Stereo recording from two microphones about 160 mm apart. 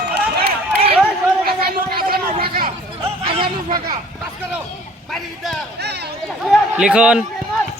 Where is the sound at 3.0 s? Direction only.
35° right (ahead or behind).